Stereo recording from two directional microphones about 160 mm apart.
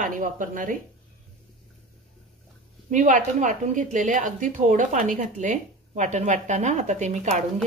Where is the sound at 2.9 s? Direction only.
50° right (ahead or behind).